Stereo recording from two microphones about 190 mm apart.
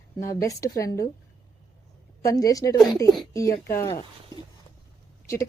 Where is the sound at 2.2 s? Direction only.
20° left (ahead or behind).